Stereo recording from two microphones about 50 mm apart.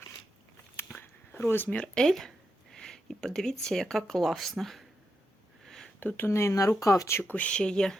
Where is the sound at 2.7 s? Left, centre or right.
Centre.